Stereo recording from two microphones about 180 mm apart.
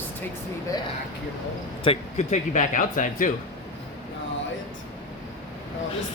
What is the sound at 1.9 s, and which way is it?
Speech, 40° left (ahead or behind).